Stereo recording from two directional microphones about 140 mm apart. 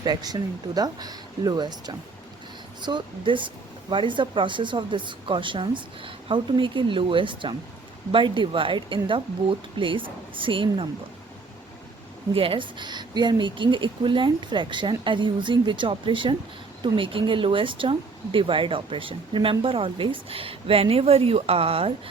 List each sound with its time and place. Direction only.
0.0 s a woman's voice: 30° right (ahead or behind)
12.3 s a woman's voice: 40° right (ahead or behind)